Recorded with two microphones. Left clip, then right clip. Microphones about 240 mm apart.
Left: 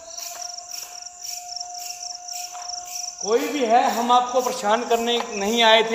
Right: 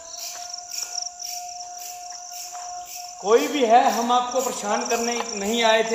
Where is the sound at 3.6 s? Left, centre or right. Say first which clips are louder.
Right 1 dB; centre.